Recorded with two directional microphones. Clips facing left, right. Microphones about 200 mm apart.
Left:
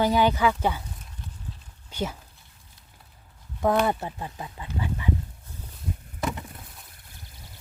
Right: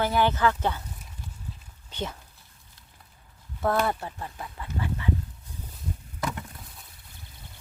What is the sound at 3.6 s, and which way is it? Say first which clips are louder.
Speech: left 3 dB; 20° left (ahead or behind).